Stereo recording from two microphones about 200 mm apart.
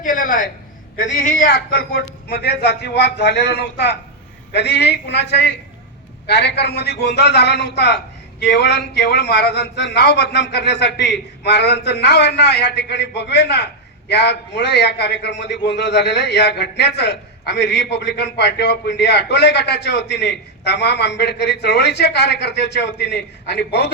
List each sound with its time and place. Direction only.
0.0 s a man's voice: 40° left (ahead or behind)
1.5 s a man's voice: 55° left (ahead or behind)